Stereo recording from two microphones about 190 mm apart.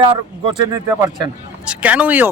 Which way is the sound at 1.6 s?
5° right (ahead or behind).